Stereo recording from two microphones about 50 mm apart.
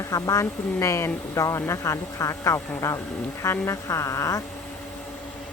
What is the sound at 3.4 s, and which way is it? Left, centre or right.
Speech, left.